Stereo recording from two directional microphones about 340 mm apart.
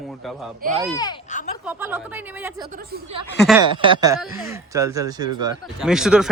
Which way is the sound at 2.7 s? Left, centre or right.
Right.